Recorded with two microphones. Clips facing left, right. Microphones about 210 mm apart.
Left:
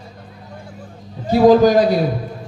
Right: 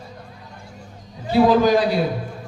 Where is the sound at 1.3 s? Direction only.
45° left (ahead or behind).